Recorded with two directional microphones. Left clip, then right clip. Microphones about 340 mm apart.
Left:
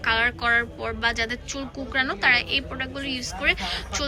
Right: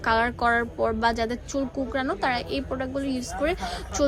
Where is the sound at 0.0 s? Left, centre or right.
Centre.